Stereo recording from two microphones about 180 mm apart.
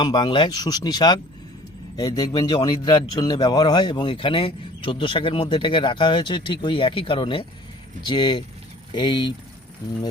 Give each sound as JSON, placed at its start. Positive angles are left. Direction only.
{"t": 0.0, "sound": "a man's voice", "side_deg": 25}